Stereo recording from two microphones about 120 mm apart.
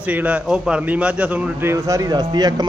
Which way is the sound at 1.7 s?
25° right (ahead or behind).